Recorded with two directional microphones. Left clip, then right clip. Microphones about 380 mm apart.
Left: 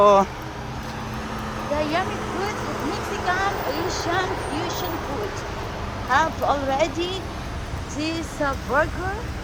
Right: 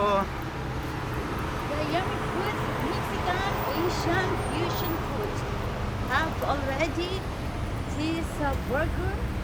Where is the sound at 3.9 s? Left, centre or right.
Left.